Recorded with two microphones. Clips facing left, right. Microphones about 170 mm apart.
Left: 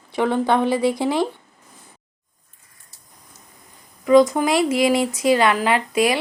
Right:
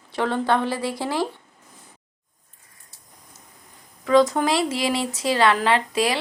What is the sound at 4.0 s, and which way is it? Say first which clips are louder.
Speech: left 3 dB; 10° left (ahead or behind).